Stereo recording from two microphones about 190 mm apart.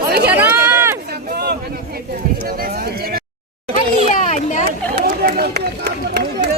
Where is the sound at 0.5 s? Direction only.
10° right (ahead or behind).